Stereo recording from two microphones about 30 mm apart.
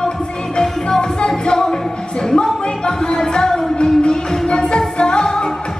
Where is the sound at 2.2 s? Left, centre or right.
Left.